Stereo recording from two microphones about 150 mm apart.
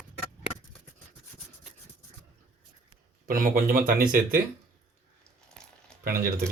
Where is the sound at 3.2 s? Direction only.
70° right (ahead or behind).